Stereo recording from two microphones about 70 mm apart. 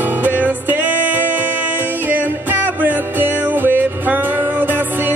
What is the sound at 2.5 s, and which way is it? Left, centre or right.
Music, right.